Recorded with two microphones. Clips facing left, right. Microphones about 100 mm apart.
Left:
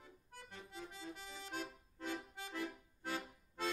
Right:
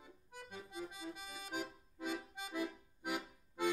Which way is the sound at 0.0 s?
15° right (ahead or behind).